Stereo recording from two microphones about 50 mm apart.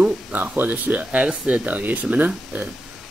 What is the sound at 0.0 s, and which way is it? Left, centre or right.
Speech, right.